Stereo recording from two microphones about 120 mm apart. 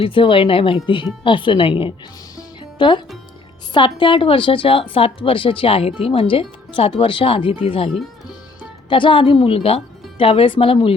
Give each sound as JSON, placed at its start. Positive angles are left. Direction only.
{"t": 0.0, "sound": "a woman's voice", "side_deg": 45}
{"t": 2.3, "sound": "music", "side_deg": 40}
{"t": 3.8, "sound": "a woman's voice", "side_deg": 45}
{"t": 8.9, "sound": "a woman's voice", "side_deg": 45}